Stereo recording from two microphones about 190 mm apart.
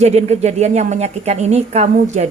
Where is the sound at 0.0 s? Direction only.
35° right (ahead or behind).